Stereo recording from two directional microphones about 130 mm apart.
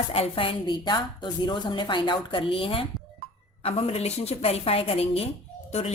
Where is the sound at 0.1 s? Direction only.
45° left (ahead or behind).